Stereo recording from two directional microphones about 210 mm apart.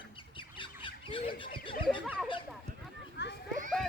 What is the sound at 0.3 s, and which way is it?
Bird, 25° left (ahead or behind).